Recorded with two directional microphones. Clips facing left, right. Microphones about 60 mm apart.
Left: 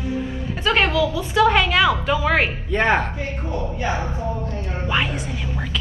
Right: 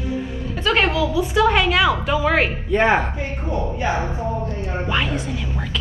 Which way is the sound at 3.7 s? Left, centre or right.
Right.